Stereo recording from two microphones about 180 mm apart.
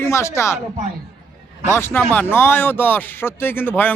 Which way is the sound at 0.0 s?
15° left (ahead or behind).